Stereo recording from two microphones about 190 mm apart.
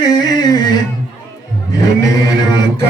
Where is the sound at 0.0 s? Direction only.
20° left (ahead or behind).